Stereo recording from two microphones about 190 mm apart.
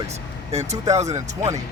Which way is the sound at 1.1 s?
15° right (ahead or behind).